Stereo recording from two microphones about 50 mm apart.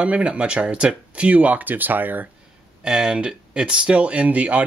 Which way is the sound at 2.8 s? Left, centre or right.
Centre.